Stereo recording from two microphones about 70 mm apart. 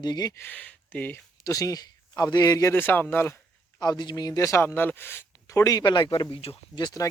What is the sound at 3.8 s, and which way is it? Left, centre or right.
Speech, left.